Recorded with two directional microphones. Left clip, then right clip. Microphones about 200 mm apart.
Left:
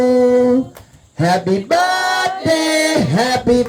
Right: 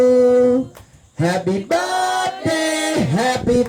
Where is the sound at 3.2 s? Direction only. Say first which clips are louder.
Left 1 dB; 15° left (ahead or behind).